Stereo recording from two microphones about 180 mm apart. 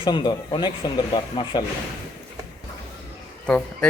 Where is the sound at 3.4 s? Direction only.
5° left (ahead or behind).